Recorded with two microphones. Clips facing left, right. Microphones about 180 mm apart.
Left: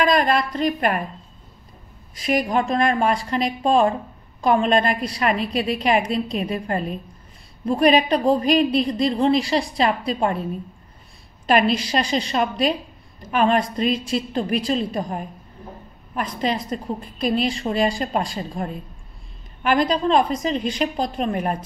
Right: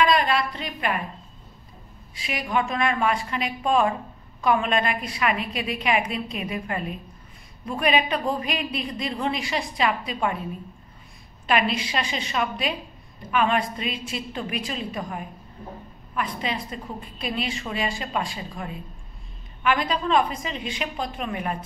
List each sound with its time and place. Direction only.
0.0 s a woman's voice: 45° left (ahead or behind)
2.1 s a woman's voice: 40° left (ahead or behind)
11.4 s a woman's voice: 40° left (ahead or behind)